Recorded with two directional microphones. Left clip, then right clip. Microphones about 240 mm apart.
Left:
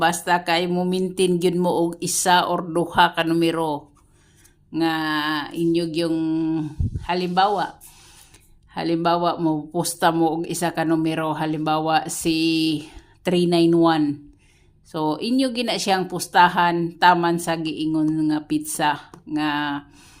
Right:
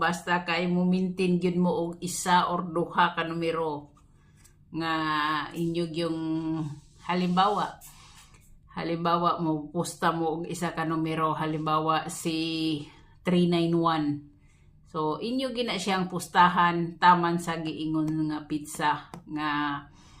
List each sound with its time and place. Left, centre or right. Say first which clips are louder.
0.0 s speech: left 7 dB; left
8.7 s speech: left 6 dB; left